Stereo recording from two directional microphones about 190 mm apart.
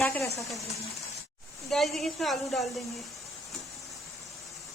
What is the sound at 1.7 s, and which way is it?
A woman's voice, centre (ahead or behind).